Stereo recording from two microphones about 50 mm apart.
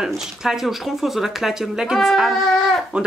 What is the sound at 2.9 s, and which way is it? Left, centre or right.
Speech, centre.